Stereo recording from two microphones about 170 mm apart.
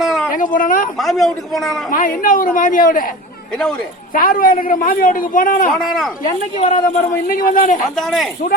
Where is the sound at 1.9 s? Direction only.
55° left (ahead or behind).